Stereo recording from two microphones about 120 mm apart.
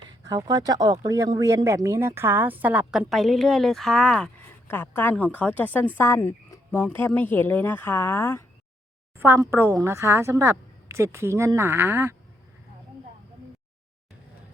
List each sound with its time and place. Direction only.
0.3 s speech: 35° right (ahead or behind); by 3.1 s 10° right (ahead or behind)
3.1 s speech: centre (ahead or behind)
4.7 s a woman's voice: 20° left (ahead or behind)
9.1 s speech: 20° right (ahead or behind)